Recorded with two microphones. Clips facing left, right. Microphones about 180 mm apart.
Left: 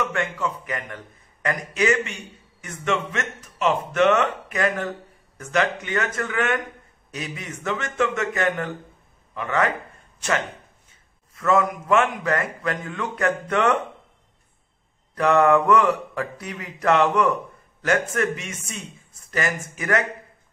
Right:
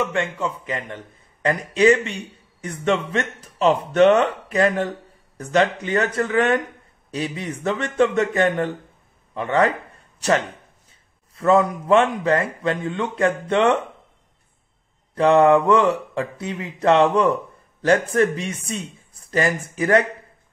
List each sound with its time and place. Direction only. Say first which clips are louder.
0.0 s a man's voice: right 2 dB; 25° right (ahead or behind)
11.3 s a man's voice: right 4 dB; 30° right (ahead or behind)
15.1 s a man's voice: right 3 dB; 25° right (ahead or behind)